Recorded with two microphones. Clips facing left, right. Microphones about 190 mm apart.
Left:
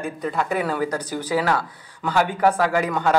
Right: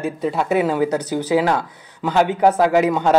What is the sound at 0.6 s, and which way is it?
Speech, 20° right (ahead or behind).